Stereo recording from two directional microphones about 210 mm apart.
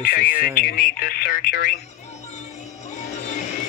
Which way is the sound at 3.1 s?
35° left (ahead or behind).